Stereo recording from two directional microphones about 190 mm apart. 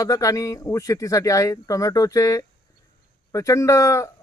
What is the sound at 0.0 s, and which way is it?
Speech, 20° left (ahead or behind).